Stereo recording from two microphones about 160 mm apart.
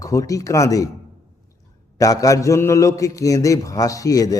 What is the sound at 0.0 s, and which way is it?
Speech, 20° left (ahead or behind).